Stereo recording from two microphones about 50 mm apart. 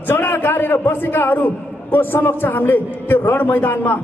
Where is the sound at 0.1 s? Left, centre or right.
Left.